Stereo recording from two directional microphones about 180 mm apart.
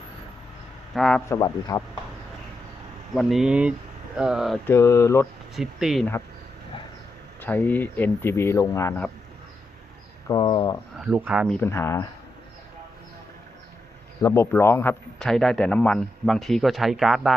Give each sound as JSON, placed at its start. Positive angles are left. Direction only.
{"t": 0.9, "sound": "a man's voice", "side_deg": 0}
{"t": 1.3, "sound": "speech", "side_deg": 20}
{"t": 3.2, "sound": "a man's voice", "side_deg": 0}
{"t": 4.6, "sound": "speech", "side_deg": 15}
{"t": 5.5, "sound": "a man's voice", "side_deg": 0}
{"t": 7.4, "sound": "speech", "side_deg": 10}
{"t": 10.2, "sound": "speech", "side_deg": 25}
{"t": 10.9, "sound": "speech", "side_deg": -5}
{"t": 11.6, "sound": "speech", "side_deg": 15}
{"t": 14.2, "sound": "a man's voice", "side_deg": 15}